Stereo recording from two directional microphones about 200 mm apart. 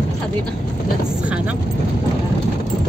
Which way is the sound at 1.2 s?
5° right (ahead or behind).